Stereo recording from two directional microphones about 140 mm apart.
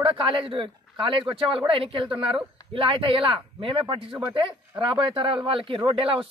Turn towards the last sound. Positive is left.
turn(degrees=-40)  # may be behind; listen again after turning